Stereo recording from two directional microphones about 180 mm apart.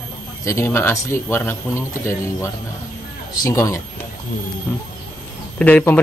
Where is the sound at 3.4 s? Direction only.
15° left (ahead or behind).